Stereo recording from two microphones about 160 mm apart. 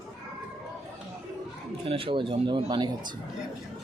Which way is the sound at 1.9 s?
35° right (ahead or behind).